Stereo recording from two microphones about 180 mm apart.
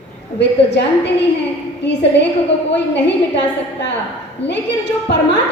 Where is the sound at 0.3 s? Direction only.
75° left (ahead or behind).